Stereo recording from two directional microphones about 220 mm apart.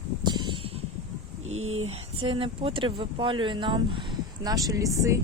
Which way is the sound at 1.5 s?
70° right (ahead or behind).